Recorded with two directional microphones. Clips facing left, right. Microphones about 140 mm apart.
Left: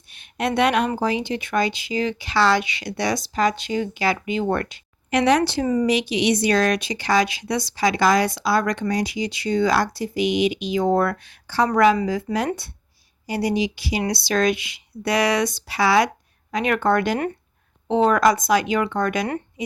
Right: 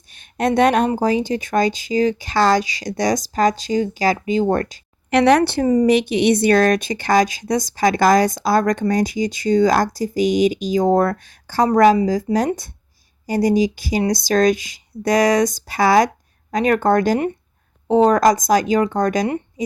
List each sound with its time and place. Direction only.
0.1 s a sound: 45° right (ahead or behind)
0.9 s speech: 45° right (ahead or behind)
5.1 s speech: 65° right (ahead or behind)
5.6 s speech: 40° right (ahead or behind)
5.9 s a woman's voice: 55° right (ahead or behind); by 19.7 s 40° right (ahead or behind)